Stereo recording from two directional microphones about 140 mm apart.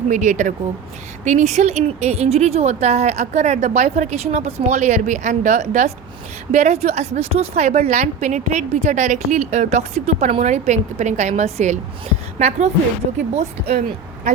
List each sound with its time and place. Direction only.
0.1 s a woman's voice: 60° right (ahead or behind)